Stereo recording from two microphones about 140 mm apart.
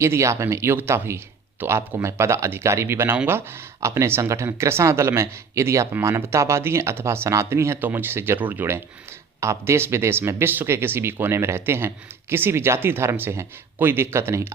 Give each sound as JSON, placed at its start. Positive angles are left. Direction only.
{"t": 0.0, "sound": "speech", "side_deg": -20}